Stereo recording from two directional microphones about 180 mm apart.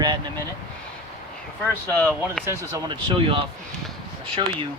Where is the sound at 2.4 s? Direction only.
20° right (ahead or behind).